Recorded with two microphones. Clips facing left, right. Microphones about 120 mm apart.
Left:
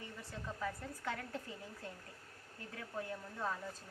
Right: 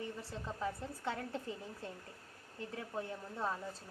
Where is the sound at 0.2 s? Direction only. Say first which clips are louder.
Right 2 dB; 25° right (ahead or behind).